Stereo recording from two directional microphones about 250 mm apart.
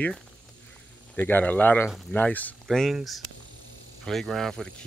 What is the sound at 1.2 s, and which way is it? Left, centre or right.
Speech, centre.